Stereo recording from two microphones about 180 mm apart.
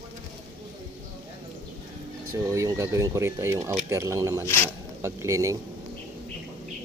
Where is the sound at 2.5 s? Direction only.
15° right (ahead or behind).